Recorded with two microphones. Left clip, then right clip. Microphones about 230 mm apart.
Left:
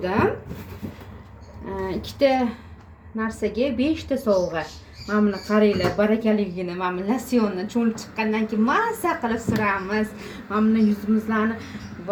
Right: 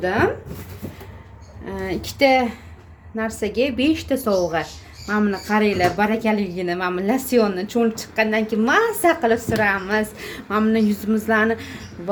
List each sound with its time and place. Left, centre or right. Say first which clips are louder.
1.7 s a woman's voice: right 2 dB; right